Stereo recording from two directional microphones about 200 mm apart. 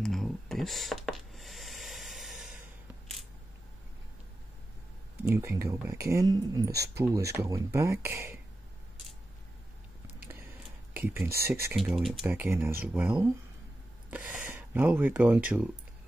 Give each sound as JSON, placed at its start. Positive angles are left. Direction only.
{"t": 0.0, "sound": "a sound", "side_deg": 0}
{"t": 5.2, "sound": "speech", "side_deg": -15}
{"t": 10.9, "sound": "speech", "side_deg": -10}